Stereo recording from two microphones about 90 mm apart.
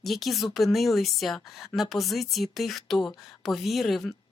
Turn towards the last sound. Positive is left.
turn(degrees=0)  # may be behind; listen again after turning